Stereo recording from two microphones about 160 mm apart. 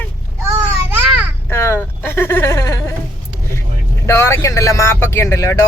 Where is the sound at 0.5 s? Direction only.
15° right (ahead or behind).